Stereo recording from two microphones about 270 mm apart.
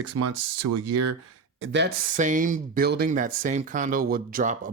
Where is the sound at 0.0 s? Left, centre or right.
Right.